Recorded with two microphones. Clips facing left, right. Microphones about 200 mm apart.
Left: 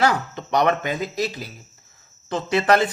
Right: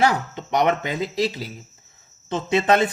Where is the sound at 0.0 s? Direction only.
20° right (ahead or behind).